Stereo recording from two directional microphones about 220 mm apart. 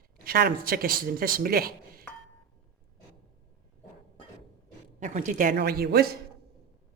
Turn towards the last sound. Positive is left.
turn(degrees=-45)  # may be behind; listen again after turning